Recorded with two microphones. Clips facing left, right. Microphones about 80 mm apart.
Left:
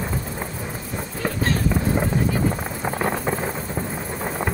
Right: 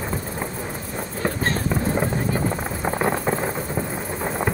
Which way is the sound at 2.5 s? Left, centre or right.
Centre.